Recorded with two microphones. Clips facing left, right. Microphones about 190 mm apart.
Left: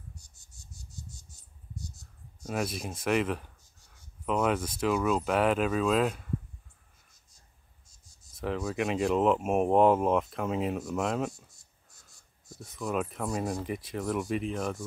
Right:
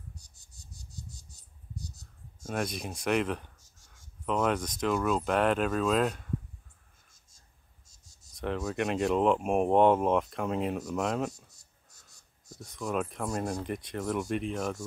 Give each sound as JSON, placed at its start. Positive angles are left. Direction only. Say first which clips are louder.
{"t": 2.4, "sound": "speech", "louder": "left 1 dB", "side_deg": 5}
{"t": 3.8, "sound": "writing", "louder": "left 1 dB", "side_deg": -90}
{"t": 4.3, "sound": "speech", "louder": "left 1 dB", "side_deg": 5}
{"t": 8.4, "sound": "speech", "louder": "even", "side_deg": 0}
{"t": 12.4, "sound": "speech", "louder": "left 1 dB", "side_deg": 5}